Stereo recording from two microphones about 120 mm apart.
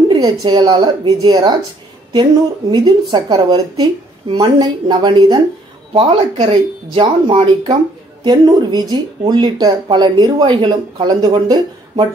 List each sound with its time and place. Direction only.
0.1 s speech: 35° right (ahead or behind)
2.7 s speech: 35° right (ahead or behind)
5.9 s speech: 50° right (ahead or behind); by 11.6 s 35° right (ahead or behind)